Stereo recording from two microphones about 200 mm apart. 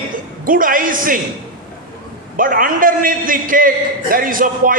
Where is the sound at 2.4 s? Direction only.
45° right (ahead or behind).